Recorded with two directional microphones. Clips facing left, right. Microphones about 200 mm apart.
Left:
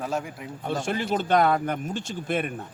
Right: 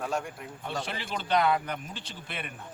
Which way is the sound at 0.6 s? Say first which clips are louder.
Left 8 dB; 45° left (ahead or behind).